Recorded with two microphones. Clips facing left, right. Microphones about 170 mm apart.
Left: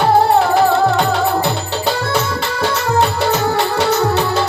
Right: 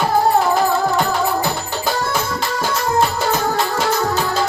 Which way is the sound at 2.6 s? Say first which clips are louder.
Left 2 dB; 65° left (ahead or behind).